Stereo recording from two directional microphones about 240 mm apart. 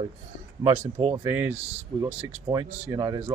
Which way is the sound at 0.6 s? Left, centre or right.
Right.